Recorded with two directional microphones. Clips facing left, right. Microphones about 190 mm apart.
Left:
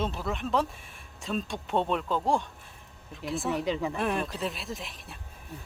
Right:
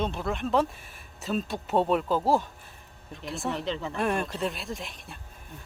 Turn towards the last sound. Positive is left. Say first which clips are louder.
# right 2 dB
turn(degrees=0)  # may be behind; listen again after turning